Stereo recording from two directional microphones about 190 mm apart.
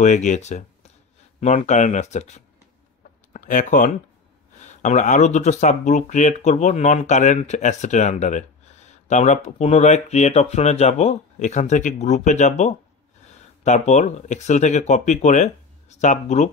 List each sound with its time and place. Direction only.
0.0 s speech: 40° left (ahead or behind)